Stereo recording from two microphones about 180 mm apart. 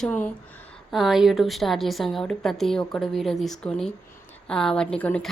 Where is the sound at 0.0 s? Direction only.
5° left (ahead or behind).